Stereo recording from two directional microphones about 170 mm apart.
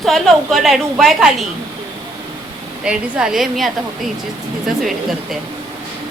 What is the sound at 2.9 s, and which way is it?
Speech, 5° right (ahead or behind).